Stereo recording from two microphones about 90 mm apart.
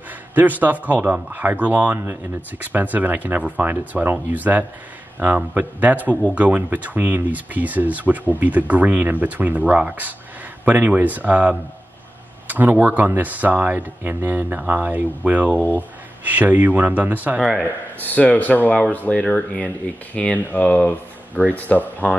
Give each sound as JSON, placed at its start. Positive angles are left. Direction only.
{"t": 0.3, "sound": "speech", "side_deg": -20}
{"t": 17.6, "sound": "a man's voice", "side_deg": 15}